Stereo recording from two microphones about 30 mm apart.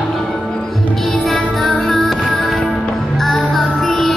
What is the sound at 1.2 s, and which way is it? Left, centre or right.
Music, centre.